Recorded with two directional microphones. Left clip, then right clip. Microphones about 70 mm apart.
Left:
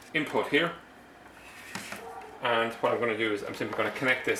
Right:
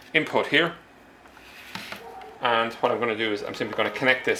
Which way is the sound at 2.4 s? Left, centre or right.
Centre.